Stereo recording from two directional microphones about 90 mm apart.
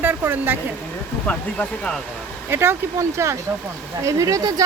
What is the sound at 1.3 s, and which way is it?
Speech, 15° left (ahead or behind).